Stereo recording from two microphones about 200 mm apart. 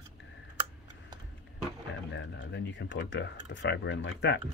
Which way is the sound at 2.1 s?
60° left (ahead or behind).